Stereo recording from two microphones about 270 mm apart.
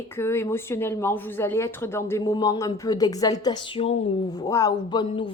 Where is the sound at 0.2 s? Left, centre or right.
Centre.